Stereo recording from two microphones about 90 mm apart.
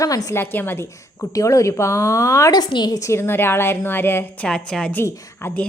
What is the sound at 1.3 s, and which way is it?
A woman's voice, 35° left (ahead or behind).